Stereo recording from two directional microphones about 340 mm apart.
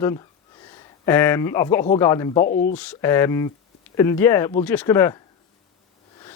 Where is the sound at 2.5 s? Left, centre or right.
Left.